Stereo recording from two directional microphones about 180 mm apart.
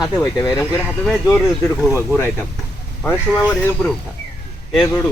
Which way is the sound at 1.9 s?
10° right (ahead or behind).